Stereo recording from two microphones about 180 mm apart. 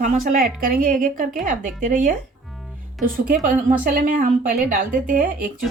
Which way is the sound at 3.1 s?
50° right (ahead or behind).